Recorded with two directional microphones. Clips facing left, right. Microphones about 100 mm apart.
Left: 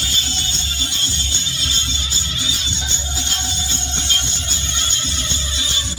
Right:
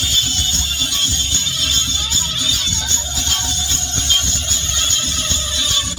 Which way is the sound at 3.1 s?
40° left (ahead or behind).